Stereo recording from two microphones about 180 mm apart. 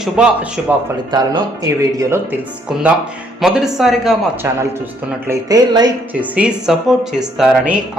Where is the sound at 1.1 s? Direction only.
20° right (ahead or behind).